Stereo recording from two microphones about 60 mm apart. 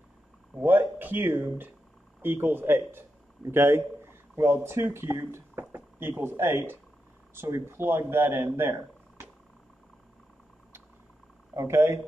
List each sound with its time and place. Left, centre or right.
0.6 s speech: right
11.5 s speech: right